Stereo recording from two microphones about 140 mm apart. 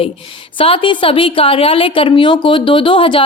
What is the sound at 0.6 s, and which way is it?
A woman's voice, 40° left (ahead or behind).